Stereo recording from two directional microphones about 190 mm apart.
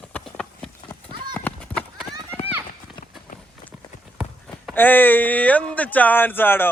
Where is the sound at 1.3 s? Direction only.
5° left (ahead or behind).